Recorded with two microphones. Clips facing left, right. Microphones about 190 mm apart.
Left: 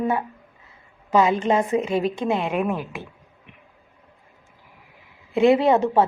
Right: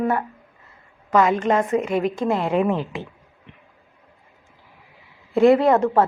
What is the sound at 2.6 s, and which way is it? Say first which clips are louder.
Speech: right 3 dB; 10° left (ahead or behind).